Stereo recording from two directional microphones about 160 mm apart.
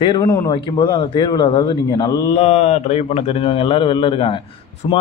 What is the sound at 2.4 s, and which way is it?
A man's voice, 40° left (ahead or behind).